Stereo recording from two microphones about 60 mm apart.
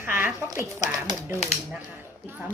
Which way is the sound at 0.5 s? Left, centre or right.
Right.